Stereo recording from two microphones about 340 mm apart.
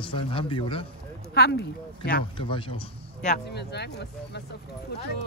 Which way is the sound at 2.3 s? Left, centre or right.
Centre.